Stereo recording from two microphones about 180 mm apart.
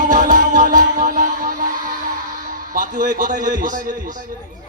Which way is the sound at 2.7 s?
50° right (ahead or behind).